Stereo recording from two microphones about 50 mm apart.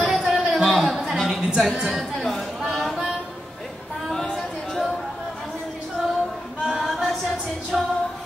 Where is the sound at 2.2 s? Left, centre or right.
Centre.